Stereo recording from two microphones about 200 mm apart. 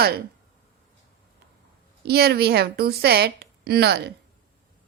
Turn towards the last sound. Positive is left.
turn(degrees=-55)  # may be behind; listen again after turning